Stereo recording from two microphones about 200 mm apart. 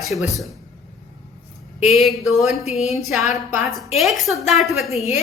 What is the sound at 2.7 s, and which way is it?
Speech, 30° left (ahead or behind).